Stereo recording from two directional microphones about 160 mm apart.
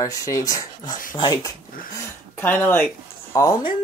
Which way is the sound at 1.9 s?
15° left (ahead or behind).